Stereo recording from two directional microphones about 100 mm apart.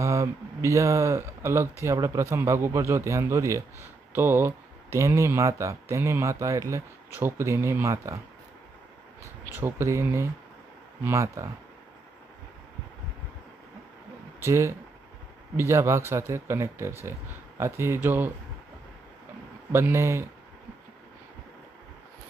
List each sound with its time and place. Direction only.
0.0 s speech: 30° right (ahead or behind)
9.5 s speech: 25° right (ahead or behind)
14.3 s speech: 25° right (ahead or behind)
19.7 s speech: 25° right (ahead or behind)